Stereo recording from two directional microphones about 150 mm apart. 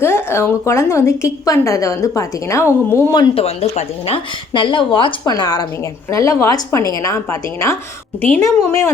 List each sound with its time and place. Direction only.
0.0 s a woman's voice: 15° left (ahead or behind)
3.3 s a woman's voice: 45° left (ahead or behind); by 8.9 s 20° left (ahead or behind)